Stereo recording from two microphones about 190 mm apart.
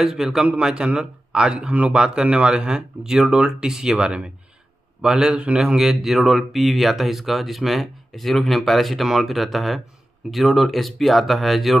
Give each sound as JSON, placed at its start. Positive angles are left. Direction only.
{"t": 0.0, "sound": "speech", "side_deg": -5}